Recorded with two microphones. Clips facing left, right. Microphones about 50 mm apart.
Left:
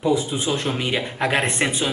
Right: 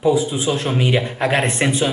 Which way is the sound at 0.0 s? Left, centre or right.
Centre.